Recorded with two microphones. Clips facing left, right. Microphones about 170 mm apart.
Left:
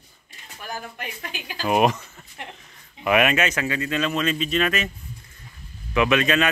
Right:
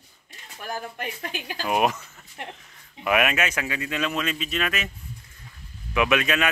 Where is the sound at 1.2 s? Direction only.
45° right (ahead or behind).